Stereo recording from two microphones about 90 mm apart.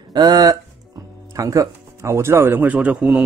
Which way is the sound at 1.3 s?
40° right (ahead or behind).